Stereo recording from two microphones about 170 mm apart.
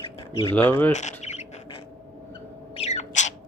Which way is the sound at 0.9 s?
45° left (ahead or behind).